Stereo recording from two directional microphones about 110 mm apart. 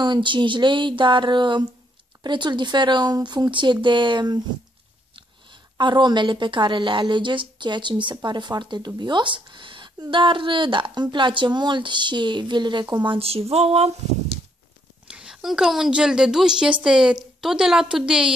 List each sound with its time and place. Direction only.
0.0 s a woman's voice: 45° right (ahead or behind)
13.0 s speech: 55° right (ahead or behind); by 13.9 s 70° right (ahead or behind)
15.0 s a woman's voice: 10° right (ahead or behind)